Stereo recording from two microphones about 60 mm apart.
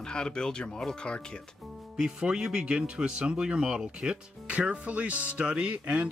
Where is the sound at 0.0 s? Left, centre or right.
Centre.